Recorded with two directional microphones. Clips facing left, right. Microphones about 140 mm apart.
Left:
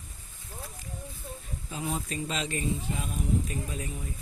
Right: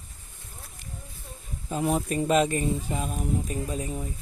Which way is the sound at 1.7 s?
55° right (ahead or behind).